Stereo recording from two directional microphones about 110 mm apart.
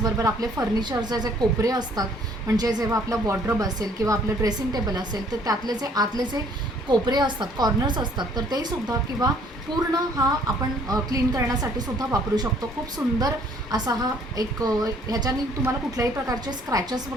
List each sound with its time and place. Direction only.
0.0 s a woman's voice: 35° right (ahead or behind)